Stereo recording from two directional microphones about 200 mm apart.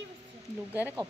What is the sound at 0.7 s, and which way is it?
Speech, 10° right (ahead or behind).